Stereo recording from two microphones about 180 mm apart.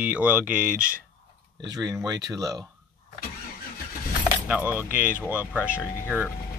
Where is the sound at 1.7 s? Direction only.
20° right (ahead or behind).